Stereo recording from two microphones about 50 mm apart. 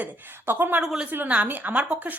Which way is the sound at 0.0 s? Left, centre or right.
Right.